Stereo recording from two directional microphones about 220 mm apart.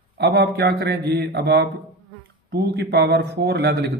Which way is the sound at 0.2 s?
45° right (ahead or behind).